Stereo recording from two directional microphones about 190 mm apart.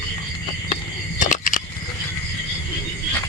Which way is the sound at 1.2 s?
40° left (ahead or behind).